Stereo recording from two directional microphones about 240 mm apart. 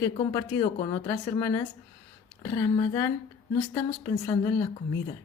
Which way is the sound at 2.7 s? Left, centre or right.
Centre.